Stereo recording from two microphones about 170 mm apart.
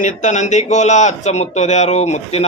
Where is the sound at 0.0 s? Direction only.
45° left (ahead or behind).